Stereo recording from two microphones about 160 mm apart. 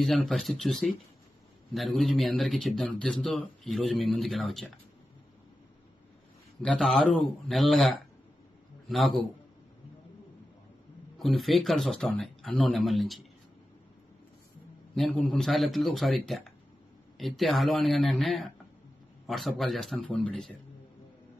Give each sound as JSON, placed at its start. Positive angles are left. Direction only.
{"t": 0.0, "sound": "speech", "side_deg": 0}
{"t": 6.6, "sound": "a man's voice", "side_deg": 0}
{"t": 11.1, "sound": "speech", "side_deg": 0}
{"t": 15.0, "sound": "speech", "side_deg": 5}